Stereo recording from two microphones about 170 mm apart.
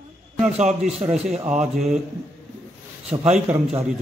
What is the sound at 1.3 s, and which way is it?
Speech, 45° right (ahead or behind).